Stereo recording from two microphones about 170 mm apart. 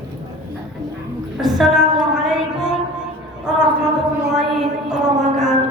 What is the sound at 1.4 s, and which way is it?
Music, centre (ahead or behind).